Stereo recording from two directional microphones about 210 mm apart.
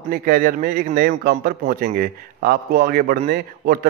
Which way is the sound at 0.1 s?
40° right (ahead or behind).